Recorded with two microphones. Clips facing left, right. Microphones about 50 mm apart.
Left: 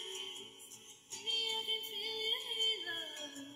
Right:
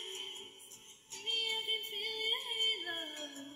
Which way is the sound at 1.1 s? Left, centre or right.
Centre.